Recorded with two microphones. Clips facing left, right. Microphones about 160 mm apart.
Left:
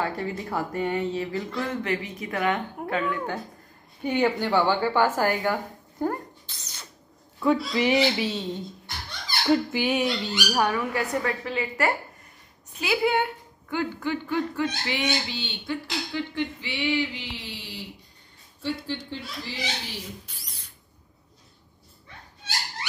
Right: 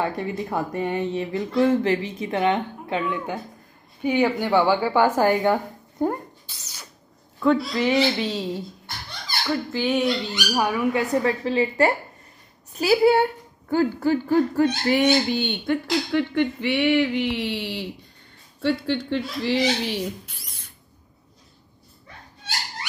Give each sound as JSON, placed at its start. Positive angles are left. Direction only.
{"t": 0.0, "sound": "speech", "side_deg": -20}
{"t": 4.0, "sound": "a woman's voice", "side_deg": -5}
{"t": 7.3, "sound": "speech", "side_deg": 10}
{"t": 9.7, "sound": "speech", "side_deg": 10}
{"t": 10.6, "sound": "speech", "side_deg": -10}
{"t": 11.2, "sound": "speech", "side_deg": -30}